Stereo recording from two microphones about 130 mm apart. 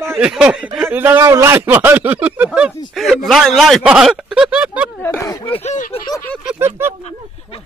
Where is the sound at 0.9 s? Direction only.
15° right (ahead or behind).